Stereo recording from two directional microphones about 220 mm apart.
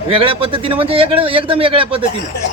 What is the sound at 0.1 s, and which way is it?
Speech, 25° right (ahead or behind).